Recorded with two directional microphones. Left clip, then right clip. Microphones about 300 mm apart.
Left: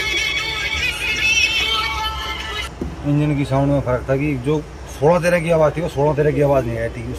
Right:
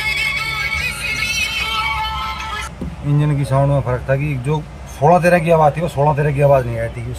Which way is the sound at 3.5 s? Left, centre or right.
Centre.